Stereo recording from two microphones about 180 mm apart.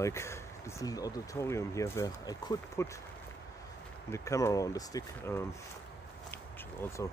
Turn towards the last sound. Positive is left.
turn(degrees=15)  # may be behind; listen again after turning